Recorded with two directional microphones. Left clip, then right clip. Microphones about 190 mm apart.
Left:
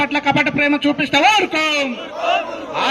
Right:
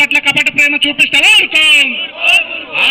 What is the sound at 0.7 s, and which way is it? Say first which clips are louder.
A man's voice: right 6 dB; 90° left.